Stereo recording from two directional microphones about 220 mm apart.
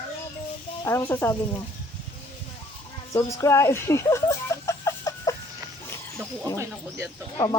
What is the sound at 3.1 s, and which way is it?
Speech, 15° left (ahead or behind).